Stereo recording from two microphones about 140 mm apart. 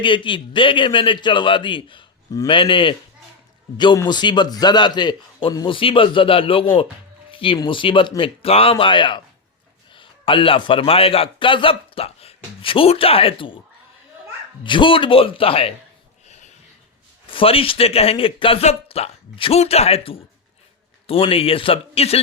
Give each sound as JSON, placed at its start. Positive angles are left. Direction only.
{"t": 0.0, "sound": "a man's voice", "side_deg": 35}
{"t": 14.6, "sound": "a man's voice", "side_deg": 35}
{"t": 17.3, "sound": "speech", "side_deg": 40}